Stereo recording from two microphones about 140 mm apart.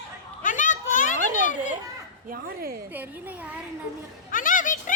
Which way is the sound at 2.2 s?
90° right.